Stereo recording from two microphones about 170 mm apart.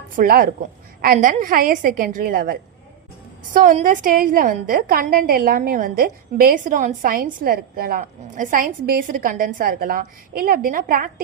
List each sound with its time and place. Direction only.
0.2 s a woman's voice: 60° right (ahead or behind)